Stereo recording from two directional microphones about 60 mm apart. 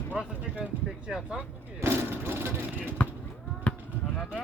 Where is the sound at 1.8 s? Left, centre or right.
Right.